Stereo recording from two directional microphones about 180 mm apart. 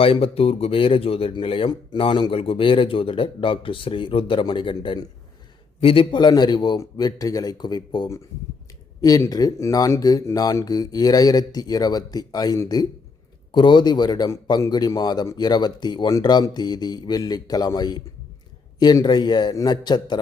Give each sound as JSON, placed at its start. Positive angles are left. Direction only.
{"t": 0.0, "sound": "speech", "side_deg": 30}